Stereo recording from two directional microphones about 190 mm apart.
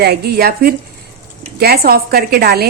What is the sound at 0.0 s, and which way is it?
A woman's voice, 55° right (ahead or behind).